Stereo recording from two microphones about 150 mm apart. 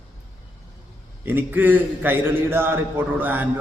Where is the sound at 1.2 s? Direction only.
15° right (ahead or behind).